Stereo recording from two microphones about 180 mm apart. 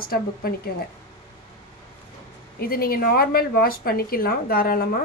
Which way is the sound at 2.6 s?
55° left (ahead or behind).